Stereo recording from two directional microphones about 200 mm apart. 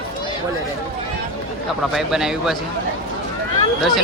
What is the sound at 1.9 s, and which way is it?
Speech, 5° right (ahead or behind).